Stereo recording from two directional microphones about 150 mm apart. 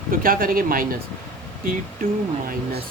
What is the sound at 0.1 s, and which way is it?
Speech, 70° right (ahead or behind).